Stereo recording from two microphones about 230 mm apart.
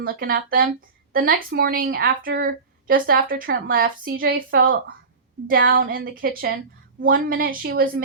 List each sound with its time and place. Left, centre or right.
0.0 s a woman's voice: right